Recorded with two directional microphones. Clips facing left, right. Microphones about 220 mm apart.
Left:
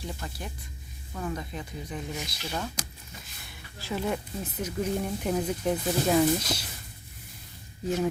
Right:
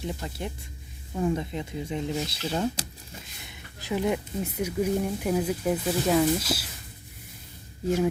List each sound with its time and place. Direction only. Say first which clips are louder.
0.0 s speech: right 5 dB; 20° right (ahead or behind); by 6.7 s 5° right (ahead or behind)